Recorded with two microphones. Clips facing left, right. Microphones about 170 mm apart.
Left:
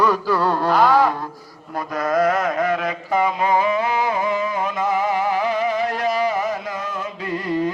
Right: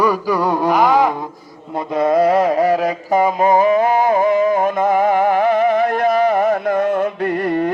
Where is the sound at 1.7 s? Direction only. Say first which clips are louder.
Right 5 dB; 25° right (ahead or behind).